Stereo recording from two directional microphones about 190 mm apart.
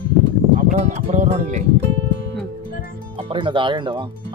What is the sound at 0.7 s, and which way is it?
Speech, 40° right (ahead or behind).